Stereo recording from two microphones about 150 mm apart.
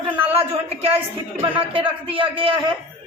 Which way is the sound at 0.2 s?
40° right (ahead or behind).